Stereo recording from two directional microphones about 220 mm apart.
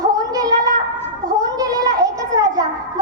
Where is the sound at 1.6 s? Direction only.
15° right (ahead or behind).